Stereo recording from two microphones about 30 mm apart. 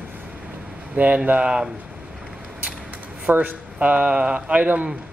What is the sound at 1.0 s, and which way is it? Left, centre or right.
Speech, right.